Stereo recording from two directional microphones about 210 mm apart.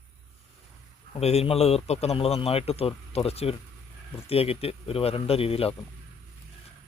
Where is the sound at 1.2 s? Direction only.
30° left (ahead or behind).